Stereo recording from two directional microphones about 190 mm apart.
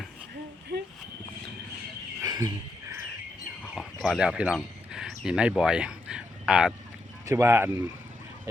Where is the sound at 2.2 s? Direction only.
20° right (ahead or behind).